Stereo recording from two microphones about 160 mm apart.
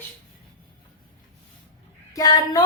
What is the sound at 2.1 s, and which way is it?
Speech, 25° left (ahead or behind).